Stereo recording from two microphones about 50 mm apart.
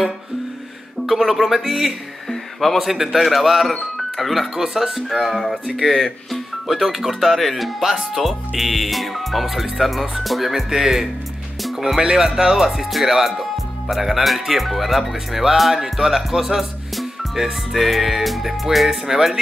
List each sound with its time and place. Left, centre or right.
1.0 s speech: centre